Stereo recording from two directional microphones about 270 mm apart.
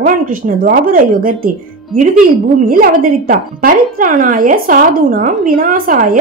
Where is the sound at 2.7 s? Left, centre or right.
Right.